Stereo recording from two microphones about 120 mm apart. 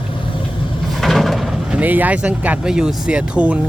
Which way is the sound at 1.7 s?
15° right (ahead or behind).